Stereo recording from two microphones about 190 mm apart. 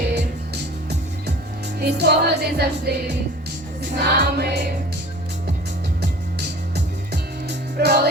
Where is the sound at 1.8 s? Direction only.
60° right (ahead or behind).